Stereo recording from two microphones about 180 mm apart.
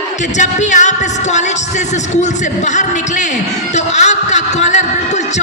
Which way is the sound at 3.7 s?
40° left (ahead or behind).